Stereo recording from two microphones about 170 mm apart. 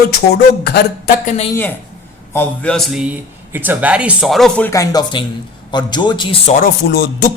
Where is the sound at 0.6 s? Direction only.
65° left (ahead or behind).